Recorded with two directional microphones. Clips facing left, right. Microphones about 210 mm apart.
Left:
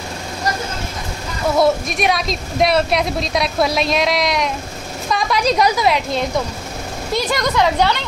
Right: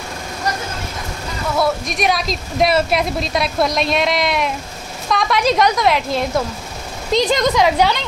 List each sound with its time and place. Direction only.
1.9 s a woman's voice: centre (ahead or behind)
7.2 s a woman's voice: 20° right (ahead or behind)